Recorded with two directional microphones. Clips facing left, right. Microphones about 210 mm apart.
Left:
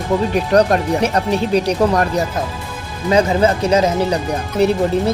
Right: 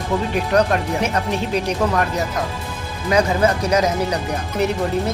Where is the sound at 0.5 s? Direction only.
35° left (ahead or behind).